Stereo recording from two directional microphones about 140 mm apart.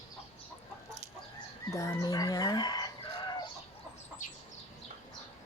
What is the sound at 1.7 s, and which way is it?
Speech, 25° left (ahead or behind).